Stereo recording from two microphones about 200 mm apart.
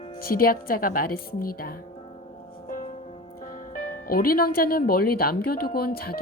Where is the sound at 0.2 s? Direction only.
50° left (ahead or behind).